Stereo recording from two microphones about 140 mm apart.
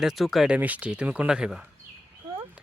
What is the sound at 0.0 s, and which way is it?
Speech, centre (ahead or behind).